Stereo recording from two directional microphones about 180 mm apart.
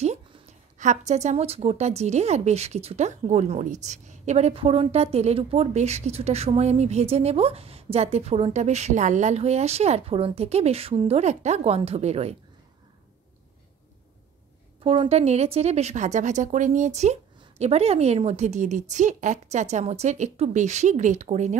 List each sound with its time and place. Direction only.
0.7 s a woman's voice: 40° right (ahead or behind)
14.8 s a woman's voice: 30° right (ahead or behind)